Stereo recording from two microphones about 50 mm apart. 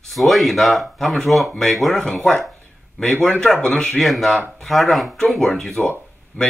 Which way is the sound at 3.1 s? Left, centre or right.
Left.